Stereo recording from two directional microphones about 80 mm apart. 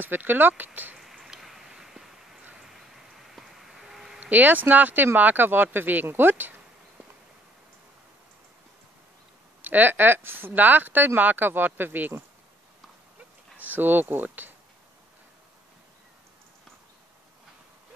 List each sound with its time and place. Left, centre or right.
0.0 s speech: right
0.9 s a sound: centre
3.3 s a sound: centre
4.2 s speech: right
9.6 s speech: right
13.6 s speech: right